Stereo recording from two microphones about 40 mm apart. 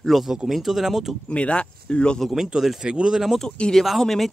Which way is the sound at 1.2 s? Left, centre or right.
Left.